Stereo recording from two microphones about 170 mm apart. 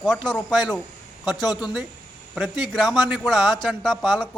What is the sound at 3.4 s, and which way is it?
Speech, 25° left (ahead or behind).